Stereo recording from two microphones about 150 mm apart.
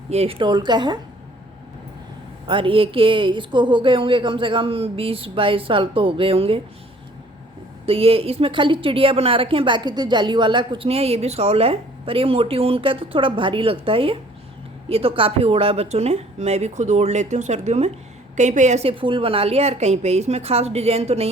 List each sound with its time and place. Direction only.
0.1 s a woman's voice: 40° right (ahead or behind)
2.5 s a woman's voice: 35° right (ahead or behind)
7.9 s a woman's voice: 40° right (ahead or behind)